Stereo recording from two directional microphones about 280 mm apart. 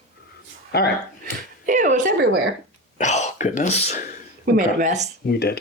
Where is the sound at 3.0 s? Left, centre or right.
Left.